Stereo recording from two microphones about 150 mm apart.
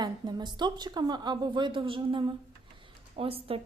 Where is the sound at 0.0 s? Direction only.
30° right (ahead or behind).